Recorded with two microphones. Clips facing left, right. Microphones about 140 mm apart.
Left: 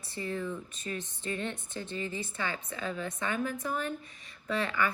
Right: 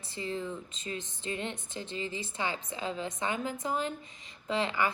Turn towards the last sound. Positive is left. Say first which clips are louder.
# right 1 dB
turn(degrees=-20)  # may be behind; listen again after turning